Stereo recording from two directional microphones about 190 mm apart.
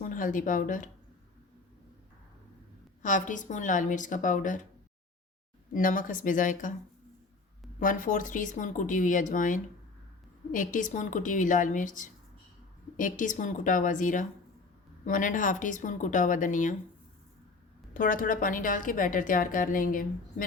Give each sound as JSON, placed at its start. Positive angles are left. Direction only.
{"t": 0.1, "sound": "a woman's voice", "side_deg": 45}
{"t": 3.0, "sound": "a woman's voice", "side_deg": 40}
{"t": 5.7, "sound": "a woman's voice", "side_deg": 45}
{"t": 7.8, "sound": "a woman's voice", "side_deg": 45}
{"t": 17.9, "sound": "a woman's voice", "side_deg": 45}